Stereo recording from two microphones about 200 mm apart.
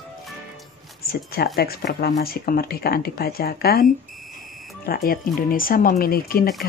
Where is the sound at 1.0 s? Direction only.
50° left (ahead or behind).